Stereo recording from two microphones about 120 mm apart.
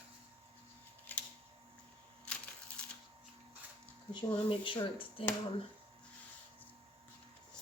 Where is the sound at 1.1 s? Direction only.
15° left (ahead or behind).